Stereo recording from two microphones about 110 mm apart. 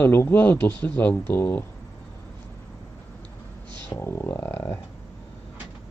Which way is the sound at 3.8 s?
30° left (ahead or behind).